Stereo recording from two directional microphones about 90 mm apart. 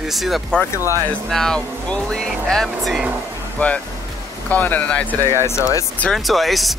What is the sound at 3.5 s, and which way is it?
Speech, 15° left (ahead or behind).